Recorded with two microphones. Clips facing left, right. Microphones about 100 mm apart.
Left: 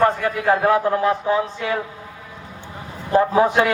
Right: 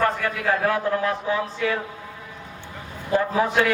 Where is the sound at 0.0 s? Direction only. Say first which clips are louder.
Left 5 dB; 30° left (ahead or behind).